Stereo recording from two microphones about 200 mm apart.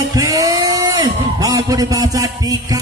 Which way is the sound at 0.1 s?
20° right (ahead or behind).